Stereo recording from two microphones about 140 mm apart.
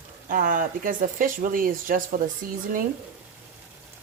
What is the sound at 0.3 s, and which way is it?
Speech, 70° right (ahead or behind).